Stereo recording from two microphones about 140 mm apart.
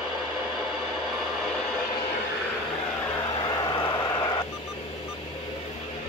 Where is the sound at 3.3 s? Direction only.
30° left (ahead or behind).